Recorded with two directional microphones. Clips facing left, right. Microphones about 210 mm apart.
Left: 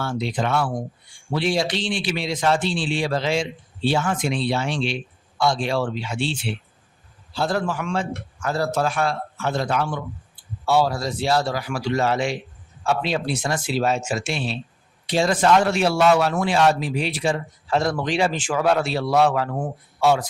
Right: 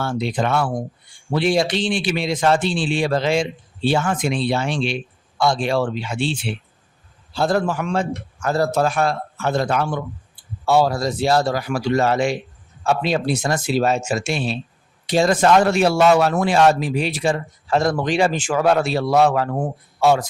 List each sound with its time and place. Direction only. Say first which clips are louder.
0.0 s a man's voice: right 3 dB; 50° right (ahead or behind)
7.3 s a man's voice: right 4 dB; 45° right (ahead or behind)